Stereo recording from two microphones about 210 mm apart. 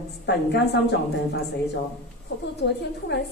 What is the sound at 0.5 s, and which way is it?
A woman's voice, 55° left (ahead or behind).